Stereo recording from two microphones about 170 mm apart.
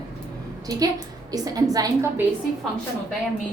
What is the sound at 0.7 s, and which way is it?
A woman's voice, 20° right (ahead or behind).